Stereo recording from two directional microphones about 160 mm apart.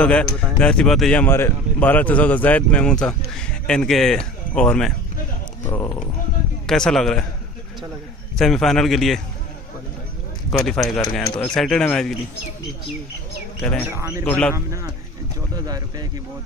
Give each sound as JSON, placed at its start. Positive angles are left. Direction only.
{"t": 0.0, "sound": "speech", "side_deg": 5}
{"t": 5.7, "sound": "speech", "side_deg": 20}
{"t": 6.7, "sound": "speech", "side_deg": 5}
{"t": 8.4, "sound": "speech", "side_deg": 0}
{"t": 10.6, "sound": "speech", "side_deg": 0}
{"t": 13.6, "sound": "speech", "side_deg": 5}
{"t": 13.8, "sound": "speech", "side_deg": -15}
{"t": 14.2, "sound": "speech", "side_deg": 5}
{"t": 14.5, "sound": "speech", "side_deg": -20}